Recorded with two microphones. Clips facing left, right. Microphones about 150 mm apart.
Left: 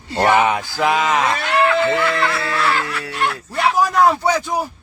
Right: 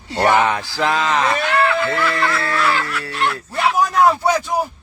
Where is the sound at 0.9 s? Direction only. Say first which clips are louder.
Left 2 dB; 15° left (ahead or behind).